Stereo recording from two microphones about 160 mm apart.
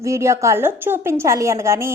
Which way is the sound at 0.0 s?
20° right (ahead or behind).